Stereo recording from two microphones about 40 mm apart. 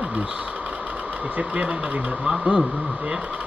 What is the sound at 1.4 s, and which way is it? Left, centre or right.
Speech, right.